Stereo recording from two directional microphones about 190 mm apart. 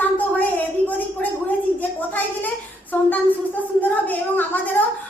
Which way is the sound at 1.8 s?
10° left (ahead or behind).